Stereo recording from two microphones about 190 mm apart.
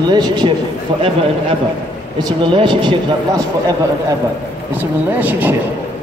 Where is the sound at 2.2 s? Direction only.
25° right (ahead or behind).